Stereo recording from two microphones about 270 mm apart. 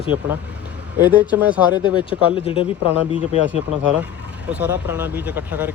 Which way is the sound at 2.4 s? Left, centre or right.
Left.